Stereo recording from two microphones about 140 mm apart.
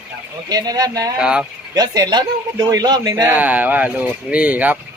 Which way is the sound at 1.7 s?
30° right (ahead or behind).